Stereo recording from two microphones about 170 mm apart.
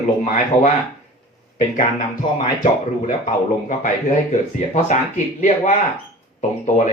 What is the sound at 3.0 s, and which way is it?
A man's voice, 50° left (ahead or behind).